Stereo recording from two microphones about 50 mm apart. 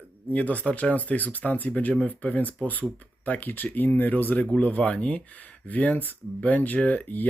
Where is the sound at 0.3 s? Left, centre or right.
Left.